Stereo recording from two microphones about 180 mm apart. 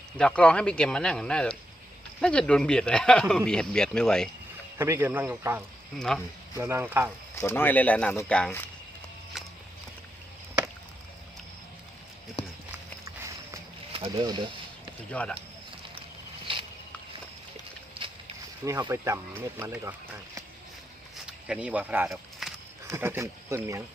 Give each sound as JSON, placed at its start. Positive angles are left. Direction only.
{"t": 0.2, "sound": "speech", "side_deg": 5}
{"t": 4.8, "sound": "speech", "side_deg": -15}
{"t": 6.0, "sound": "speech", "side_deg": 5}
{"t": 6.6, "sound": "speech", "side_deg": -15}
{"t": 7.3, "sound": "speech", "side_deg": 15}
{"t": 9.3, "sound": "walk", "side_deg": 0}
{"t": 12.4, "sound": "run", "side_deg": 35}
{"t": 13.9, "sound": "speech", "side_deg": -30}
{"t": 15.1, "sound": "speech", "side_deg": 5}
{"t": 16.5, "sound": "a sound", "side_deg": -30}
{"t": 18.6, "sound": "speech", "side_deg": -15}
{"t": 21.2, "sound": "a sound", "side_deg": -5}
{"t": 22.9, "sound": "speech", "side_deg": -15}